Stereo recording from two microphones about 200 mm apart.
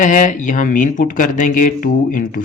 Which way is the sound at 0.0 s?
40° left (ahead or behind).